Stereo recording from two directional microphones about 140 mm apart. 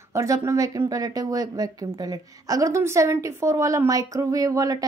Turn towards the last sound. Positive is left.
turn(degrees=-25)  # may be behind; listen again after turning